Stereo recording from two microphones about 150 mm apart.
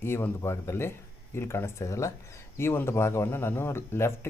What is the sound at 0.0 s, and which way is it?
Speech, 15° left (ahead or behind).